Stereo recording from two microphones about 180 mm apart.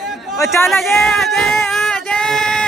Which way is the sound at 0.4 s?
15° left (ahead or behind).